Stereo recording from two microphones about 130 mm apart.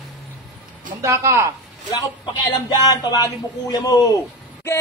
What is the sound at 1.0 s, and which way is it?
Speech, 20° right (ahead or behind).